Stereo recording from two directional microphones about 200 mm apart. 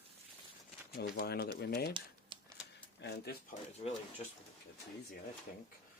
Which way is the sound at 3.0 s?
60° left (ahead or behind).